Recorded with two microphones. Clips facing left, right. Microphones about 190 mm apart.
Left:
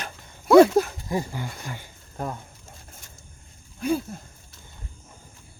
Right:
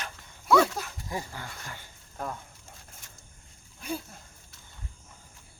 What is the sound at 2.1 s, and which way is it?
Speech, 25° left (ahead or behind).